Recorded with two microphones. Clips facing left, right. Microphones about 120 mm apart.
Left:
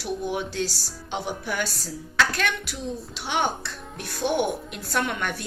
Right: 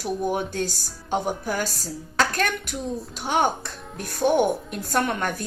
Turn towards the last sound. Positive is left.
turn(degrees=-40)  # may be behind; listen again after turning